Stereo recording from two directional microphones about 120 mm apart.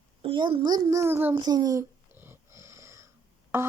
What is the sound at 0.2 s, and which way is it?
A child's voice, 45° right (ahead or behind).